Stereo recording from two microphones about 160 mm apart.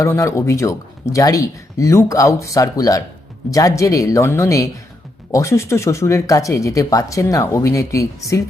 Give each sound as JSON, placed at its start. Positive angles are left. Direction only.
{"t": 0.0, "sound": "speech", "side_deg": 20}